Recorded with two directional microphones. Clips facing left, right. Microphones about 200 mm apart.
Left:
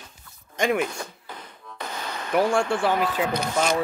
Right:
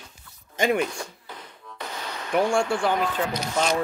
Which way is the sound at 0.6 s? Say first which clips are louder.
Even; centre (ahead or behind).